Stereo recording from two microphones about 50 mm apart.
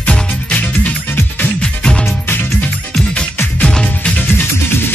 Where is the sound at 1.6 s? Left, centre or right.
Centre.